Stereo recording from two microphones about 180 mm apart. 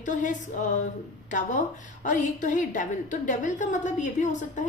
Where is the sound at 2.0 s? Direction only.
45° left (ahead or behind).